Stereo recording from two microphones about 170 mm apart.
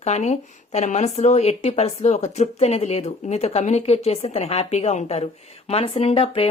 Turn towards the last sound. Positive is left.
turn(degrees=35)  # may be behind; listen again after turning